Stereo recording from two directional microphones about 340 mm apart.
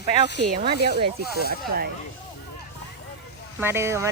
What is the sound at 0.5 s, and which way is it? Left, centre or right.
Speech, right.